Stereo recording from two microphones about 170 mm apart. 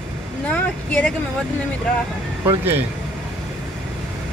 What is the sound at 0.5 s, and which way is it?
Speech, 10° left (ahead or behind).